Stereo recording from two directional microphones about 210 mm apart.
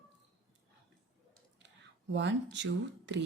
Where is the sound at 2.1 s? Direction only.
60° right (ahead or behind).